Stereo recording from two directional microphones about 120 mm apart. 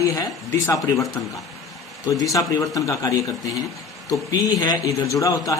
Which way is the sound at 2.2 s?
30° left (ahead or behind).